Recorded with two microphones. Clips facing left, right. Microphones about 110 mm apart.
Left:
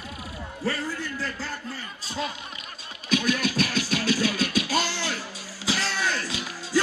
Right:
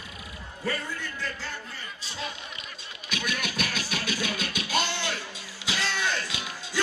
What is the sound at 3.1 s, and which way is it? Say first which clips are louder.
Music: left 8 dB; 35° left (ahead or behind).